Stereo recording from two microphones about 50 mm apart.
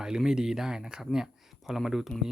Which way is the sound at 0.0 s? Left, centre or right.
Centre.